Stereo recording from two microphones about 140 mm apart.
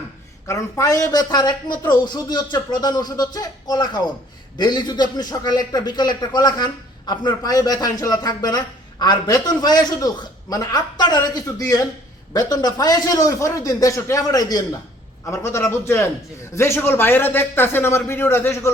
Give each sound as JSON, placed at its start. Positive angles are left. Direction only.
{"t": 0.4, "sound": "a man's voice", "side_deg": 20}